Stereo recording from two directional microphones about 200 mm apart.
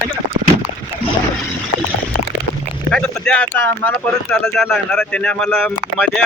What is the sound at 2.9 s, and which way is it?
Speech, 5° left (ahead or behind).